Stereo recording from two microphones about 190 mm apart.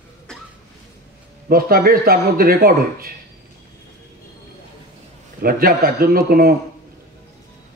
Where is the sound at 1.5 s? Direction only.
50° right (ahead or behind).